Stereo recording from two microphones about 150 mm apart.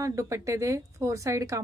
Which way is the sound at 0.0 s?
20° right (ahead or behind).